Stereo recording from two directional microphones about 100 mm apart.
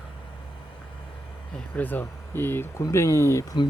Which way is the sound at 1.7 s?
15° left (ahead or behind).